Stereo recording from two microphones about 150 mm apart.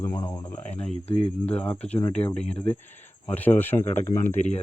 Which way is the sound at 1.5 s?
10° left (ahead or behind).